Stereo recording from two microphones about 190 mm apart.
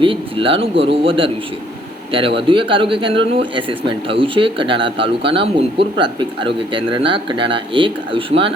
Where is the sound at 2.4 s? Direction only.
25° right (ahead or behind).